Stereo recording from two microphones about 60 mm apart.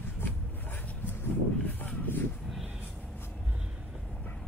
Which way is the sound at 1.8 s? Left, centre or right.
Left.